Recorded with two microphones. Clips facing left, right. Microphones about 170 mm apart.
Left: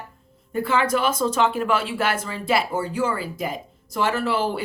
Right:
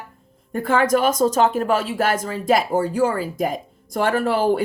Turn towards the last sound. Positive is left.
turn(degrees=-45)  # may be behind; listen again after turning